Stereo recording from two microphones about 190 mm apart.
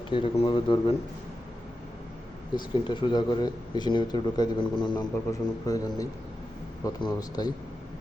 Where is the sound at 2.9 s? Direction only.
25° left (ahead or behind).